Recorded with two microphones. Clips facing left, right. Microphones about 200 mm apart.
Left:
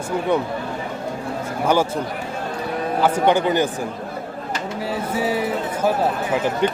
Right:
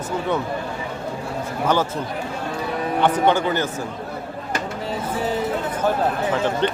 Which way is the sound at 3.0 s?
10° left (ahead or behind).